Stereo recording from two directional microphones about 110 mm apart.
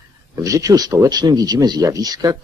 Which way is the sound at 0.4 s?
30° right (ahead or behind).